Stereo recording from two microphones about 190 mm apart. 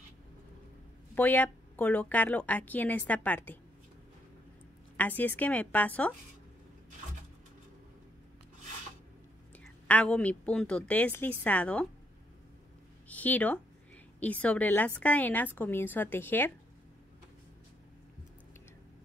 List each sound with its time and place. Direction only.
1.1 s a woman's voice: 10° left (ahead or behind)
4.9 s a woman's voice: 10° left (ahead or behind)
9.8 s a woman's voice: 5° left (ahead or behind)
13.1 s a woman's voice: 10° left (ahead or behind)